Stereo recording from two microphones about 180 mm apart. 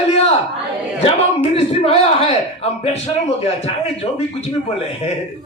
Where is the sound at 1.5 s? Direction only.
35° left (ahead or behind).